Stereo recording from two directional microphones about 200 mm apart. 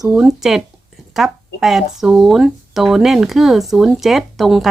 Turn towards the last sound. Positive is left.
turn(degrees=0)  # may be behind; listen again after turning